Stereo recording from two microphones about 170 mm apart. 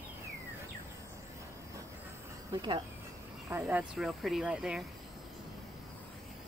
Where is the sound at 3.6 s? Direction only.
5° right (ahead or behind).